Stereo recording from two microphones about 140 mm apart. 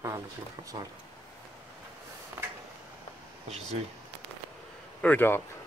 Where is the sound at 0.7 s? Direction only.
25° right (ahead or behind).